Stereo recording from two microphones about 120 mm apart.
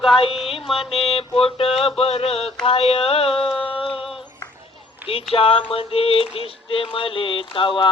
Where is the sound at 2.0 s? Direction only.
55° left (ahead or behind).